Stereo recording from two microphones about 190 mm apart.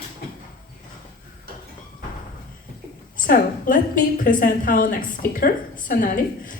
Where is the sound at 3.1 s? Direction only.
45° left (ahead or behind).